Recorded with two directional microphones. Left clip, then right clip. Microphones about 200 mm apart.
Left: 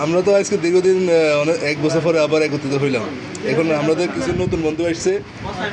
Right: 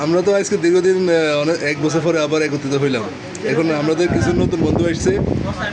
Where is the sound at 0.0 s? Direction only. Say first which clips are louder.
Even; 15° right (ahead or behind).